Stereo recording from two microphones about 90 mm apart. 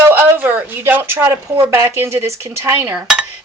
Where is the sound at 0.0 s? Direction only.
25° right (ahead or behind).